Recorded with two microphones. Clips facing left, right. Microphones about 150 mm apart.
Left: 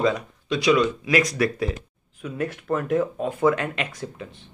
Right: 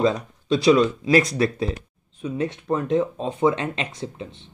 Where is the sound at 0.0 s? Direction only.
30° right (ahead or behind).